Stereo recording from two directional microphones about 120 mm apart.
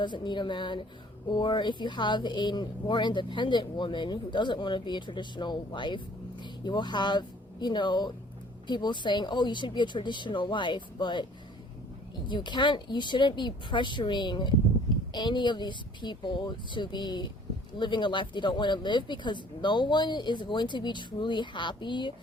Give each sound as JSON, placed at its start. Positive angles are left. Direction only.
{"t": 0.0, "sound": "speech", "side_deg": 40}
{"t": 12.3, "sound": "speech", "side_deg": 40}